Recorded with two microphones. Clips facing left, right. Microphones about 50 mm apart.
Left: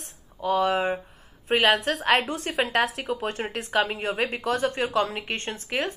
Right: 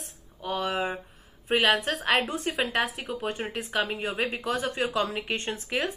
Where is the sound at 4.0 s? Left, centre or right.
Left.